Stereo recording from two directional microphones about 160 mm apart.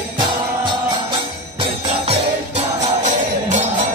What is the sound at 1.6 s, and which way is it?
Jingle bell, 35° right (ahead or behind).